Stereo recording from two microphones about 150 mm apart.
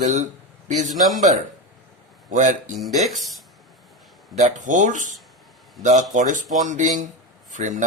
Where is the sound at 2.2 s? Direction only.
55° right (ahead or behind).